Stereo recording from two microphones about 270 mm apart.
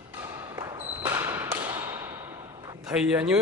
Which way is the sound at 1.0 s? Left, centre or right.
Centre.